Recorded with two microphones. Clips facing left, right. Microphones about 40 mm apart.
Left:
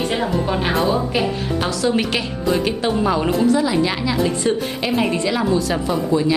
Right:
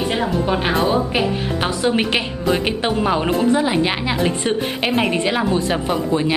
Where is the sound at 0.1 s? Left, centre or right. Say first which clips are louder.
Right 1 dB; centre.